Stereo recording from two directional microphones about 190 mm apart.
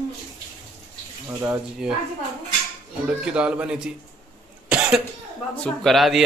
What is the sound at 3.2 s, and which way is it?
Speech, 5° right (ahead or behind).